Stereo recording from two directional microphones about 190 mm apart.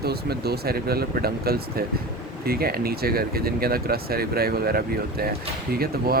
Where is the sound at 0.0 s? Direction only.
55° right (ahead or behind).